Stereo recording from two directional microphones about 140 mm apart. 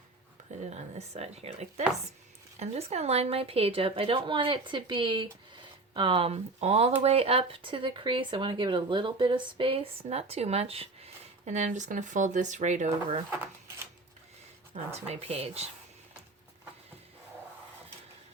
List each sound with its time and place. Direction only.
0.7 s a woman's voice: 50° right (ahead or behind)
14.9 s speech: 50° right (ahead or behind)